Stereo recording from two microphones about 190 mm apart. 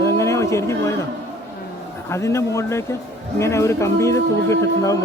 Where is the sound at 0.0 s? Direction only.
15° left (ahead or behind).